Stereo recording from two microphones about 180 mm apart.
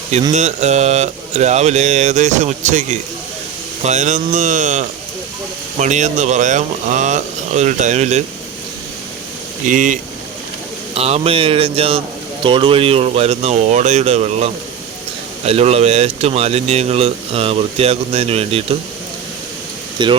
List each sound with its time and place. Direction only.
0.3 s speech: 40° right (ahead or behind)
9.6 s speech: 45° right (ahead or behind)
10.9 s speech: 35° right (ahead or behind)
20.0 s speech: 25° right (ahead or behind)